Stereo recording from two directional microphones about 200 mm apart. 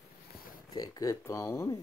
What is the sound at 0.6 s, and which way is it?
Speech, 20° left (ahead or behind).